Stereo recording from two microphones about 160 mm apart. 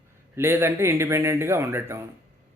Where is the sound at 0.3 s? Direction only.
15° right (ahead or behind).